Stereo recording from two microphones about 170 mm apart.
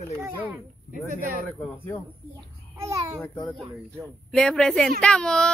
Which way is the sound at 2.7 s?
15° right (ahead or behind).